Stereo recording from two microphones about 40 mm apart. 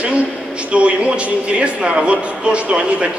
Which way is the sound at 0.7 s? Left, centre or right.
Right.